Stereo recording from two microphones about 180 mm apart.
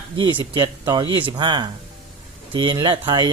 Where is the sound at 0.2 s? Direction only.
25° right (ahead or behind).